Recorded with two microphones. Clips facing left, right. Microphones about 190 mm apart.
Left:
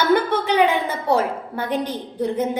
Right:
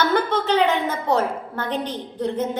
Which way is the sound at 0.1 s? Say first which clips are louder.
Left 2 dB; 10° left (ahead or behind).